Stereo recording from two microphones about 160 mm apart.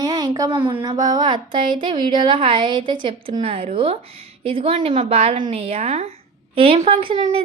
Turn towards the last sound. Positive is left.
turn(degrees=-40)  # may be behind; listen again after turning